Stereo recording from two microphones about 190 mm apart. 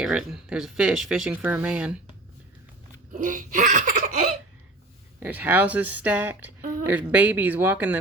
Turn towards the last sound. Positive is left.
turn(degrees=-10)  # may be behind; listen again after turning